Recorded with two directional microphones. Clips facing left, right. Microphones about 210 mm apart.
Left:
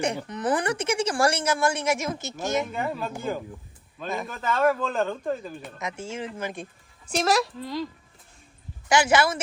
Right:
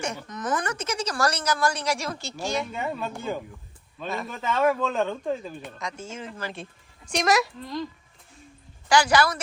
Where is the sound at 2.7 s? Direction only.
Centre (ahead or behind).